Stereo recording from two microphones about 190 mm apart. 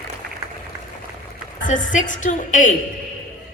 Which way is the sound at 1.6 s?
40° left (ahead or behind).